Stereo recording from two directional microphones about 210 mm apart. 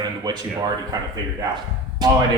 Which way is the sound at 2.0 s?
20° right (ahead or behind).